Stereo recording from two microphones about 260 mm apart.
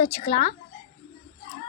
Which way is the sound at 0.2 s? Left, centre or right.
Left.